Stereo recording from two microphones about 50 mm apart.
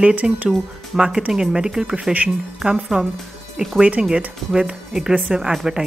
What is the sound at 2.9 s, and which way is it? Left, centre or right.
A woman's voice, right.